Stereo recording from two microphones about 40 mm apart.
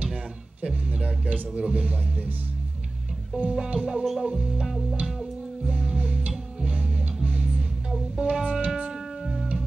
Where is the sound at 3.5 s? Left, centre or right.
Right.